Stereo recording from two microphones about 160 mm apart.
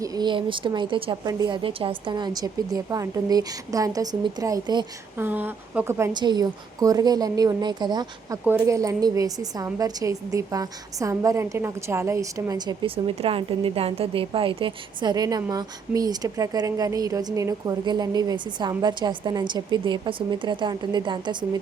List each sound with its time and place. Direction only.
0.0 s a woman's voice: 25° right (ahead or behind)
5.1 s a woman's voice: 10° right (ahead or behind)
6.1 s a woman's voice: 25° right (ahead or behind)